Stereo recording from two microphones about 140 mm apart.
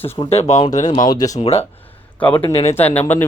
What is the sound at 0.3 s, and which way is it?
Speech, 50° left (ahead or behind).